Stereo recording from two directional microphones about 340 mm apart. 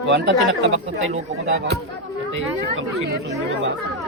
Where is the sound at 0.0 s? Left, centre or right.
Right.